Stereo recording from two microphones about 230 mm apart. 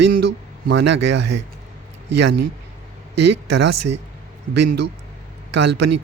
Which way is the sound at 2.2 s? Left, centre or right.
Right.